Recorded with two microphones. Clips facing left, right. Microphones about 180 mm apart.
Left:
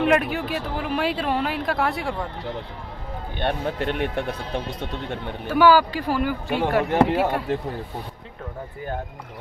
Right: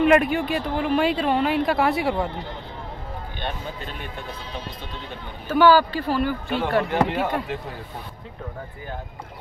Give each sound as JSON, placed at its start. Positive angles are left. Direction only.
{"t": 0.0, "sound": "speech", "side_deg": 0}
{"t": 3.3, "sound": "speech", "side_deg": 70}
{"t": 5.5, "sound": "speech", "side_deg": 10}